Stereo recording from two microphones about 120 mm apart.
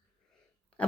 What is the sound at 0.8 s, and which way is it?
Speech, 10° left (ahead or behind).